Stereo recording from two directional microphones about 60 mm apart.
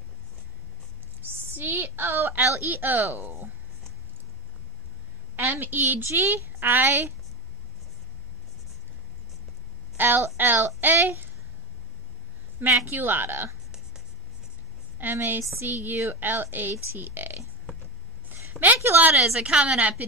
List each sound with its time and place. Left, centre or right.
1.3 s a woman's voice: right
5.3 s a woman's voice: right
6.0 s a woman's voice: right
9.9 s a woman's voice: right
12.5 s a woman's voice: right
15.0 s a woman's voice: right
18.3 s a sound: right
19.1 s a woman's voice: centre